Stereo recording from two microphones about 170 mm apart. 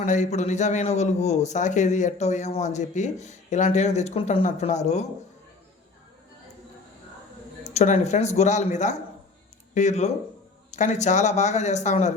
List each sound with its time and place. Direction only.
0.0 s a man's voice: 45° left (ahead or behind)
7.6 s a man's voice: 40° left (ahead or behind)